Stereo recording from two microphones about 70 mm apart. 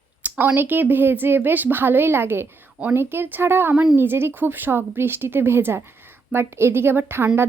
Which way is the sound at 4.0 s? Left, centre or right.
Right.